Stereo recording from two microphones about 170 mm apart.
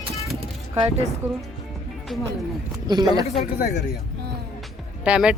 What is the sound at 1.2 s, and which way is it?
Speech, 40° right (ahead or behind).